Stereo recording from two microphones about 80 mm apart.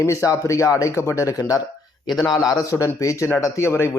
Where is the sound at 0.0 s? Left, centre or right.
Left.